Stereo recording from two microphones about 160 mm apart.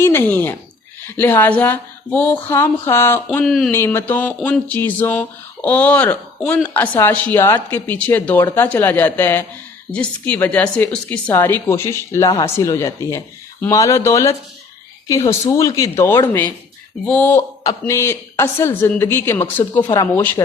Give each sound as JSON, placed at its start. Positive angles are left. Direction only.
{"t": 0.0, "sound": "a woman's voice", "side_deg": 15}
{"t": 3.3, "sound": "speech", "side_deg": 5}
{"t": 3.7, "sound": "a woman's voice", "side_deg": 15}
{"t": 17.6, "sound": "a woman's voice", "side_deg": 20}